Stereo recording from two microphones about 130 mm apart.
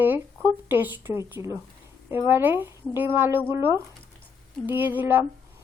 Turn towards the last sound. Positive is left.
turn(degrees=-15)  # may be behind; listen again after turning